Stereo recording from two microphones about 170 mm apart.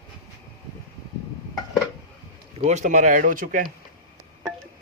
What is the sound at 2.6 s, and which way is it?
Speech, 45° right (ahead or behind).